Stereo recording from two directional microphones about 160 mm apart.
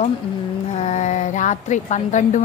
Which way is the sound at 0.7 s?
45° left (ahead or behind).